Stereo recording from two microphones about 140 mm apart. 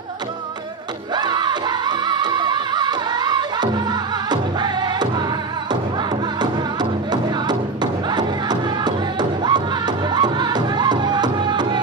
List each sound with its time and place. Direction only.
1.1 s music: 30° right (ahead or behind)
6.4 s music: 30° right (ahead or behind)